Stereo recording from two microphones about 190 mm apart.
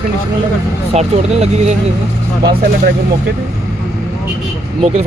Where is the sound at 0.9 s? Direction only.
35° right (ahead or behind).